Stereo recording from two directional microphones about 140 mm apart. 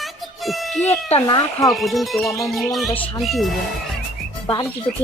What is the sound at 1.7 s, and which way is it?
Speech, centre (ahead or behind).